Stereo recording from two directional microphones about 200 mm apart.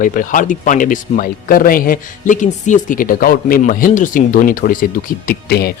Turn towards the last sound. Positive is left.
turn(degrees=50)  # may be behind; listen again after turning